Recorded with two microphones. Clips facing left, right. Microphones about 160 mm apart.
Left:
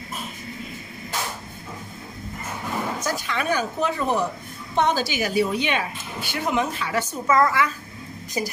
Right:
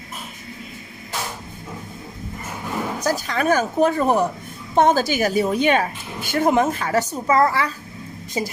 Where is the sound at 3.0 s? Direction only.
40° right (ahead or behind).